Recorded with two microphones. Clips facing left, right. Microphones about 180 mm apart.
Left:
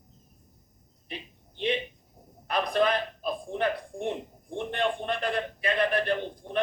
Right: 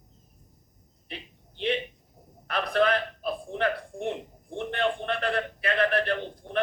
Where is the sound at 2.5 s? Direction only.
15° left (ahead or behind).